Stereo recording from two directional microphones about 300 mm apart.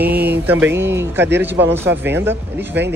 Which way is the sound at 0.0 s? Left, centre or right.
Centre.